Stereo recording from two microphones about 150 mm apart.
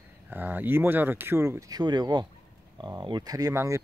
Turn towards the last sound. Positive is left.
turn(degrees=-20)  # may be behind; listen again after turning